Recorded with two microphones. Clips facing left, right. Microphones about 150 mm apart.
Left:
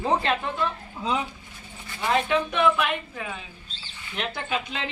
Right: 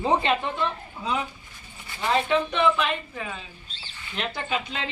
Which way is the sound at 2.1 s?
5° left (ahead or behind).